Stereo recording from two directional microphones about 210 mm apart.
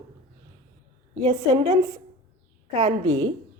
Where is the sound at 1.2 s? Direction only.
25° right (ahead or behind).